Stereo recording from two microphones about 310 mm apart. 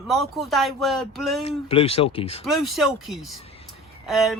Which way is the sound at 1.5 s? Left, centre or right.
Centre.